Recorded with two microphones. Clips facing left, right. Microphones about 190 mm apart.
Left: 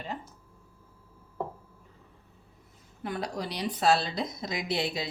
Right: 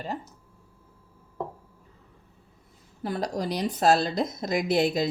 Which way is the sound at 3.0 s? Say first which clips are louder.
Right 4 dB; 40° right (ahead or behind).